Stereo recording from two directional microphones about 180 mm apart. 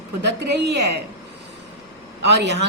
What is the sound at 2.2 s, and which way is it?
Speech, 70° right (ahead or behind).